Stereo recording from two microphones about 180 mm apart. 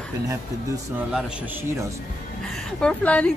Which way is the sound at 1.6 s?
15° right (ahead or behind).